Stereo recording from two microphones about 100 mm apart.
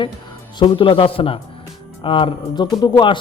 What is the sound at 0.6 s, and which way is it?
Speech, 55° left (ahead or behind).